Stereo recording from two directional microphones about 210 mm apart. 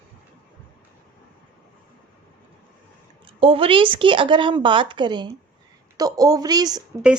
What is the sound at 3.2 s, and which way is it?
A woman's voice, 25° right (ahead or behind).